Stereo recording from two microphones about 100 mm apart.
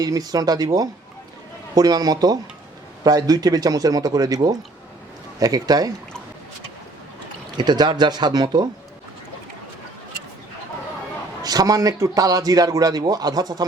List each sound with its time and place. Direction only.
0.0 s a man's voice: 40° right (ahead or behind)
7.5 s speech: 45° right (ahead or behind)
11.4 s a man's voice: 40° right (ahead or behind)